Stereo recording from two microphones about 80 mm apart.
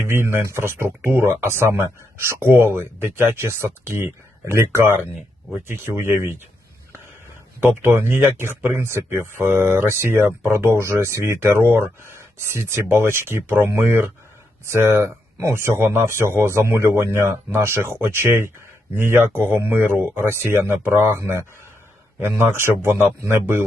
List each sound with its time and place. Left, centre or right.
0.0 s speech: right
7.6 s speech: right